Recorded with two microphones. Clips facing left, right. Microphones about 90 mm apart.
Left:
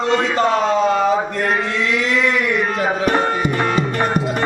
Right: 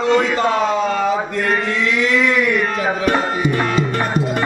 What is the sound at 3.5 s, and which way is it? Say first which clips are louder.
Music: even; 20° left (ahead or behind).